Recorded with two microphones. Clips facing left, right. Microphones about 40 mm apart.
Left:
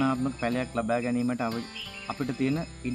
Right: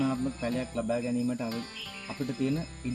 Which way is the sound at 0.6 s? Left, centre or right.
Left.